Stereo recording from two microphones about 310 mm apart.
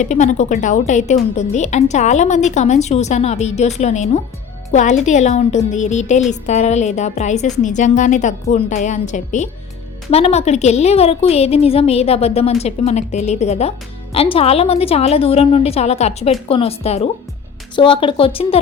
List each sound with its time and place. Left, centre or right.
0.0 s a woman's voice: left